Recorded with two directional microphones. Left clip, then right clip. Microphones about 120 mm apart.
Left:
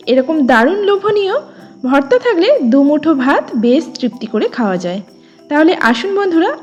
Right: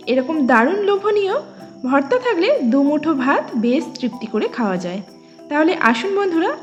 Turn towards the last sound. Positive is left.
turn(degrees=35)  # may be behind; listen again after turning